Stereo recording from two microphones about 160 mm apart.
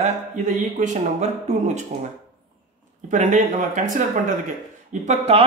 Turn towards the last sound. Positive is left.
turn(degrees=-45)  # may be behind; listen again after turning